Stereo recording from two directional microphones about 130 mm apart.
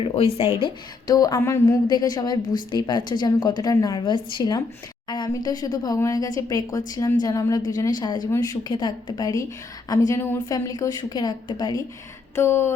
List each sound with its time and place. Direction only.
0.0 s speech: 45° left (ahead or behind)
0.6 s speech: 30° left (ahead or behind)
1.9 s a woman's voice: 30° left (ahead or behind)
12.4 s speech: 20° left (ahead or behind)